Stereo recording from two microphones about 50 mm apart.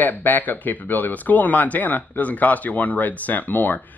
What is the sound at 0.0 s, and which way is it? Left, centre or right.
Speech, left.